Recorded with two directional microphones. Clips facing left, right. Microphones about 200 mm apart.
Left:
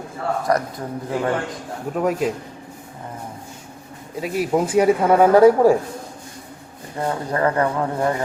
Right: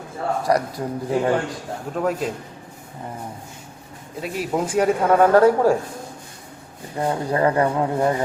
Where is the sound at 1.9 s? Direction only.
5° left (ahead or behind).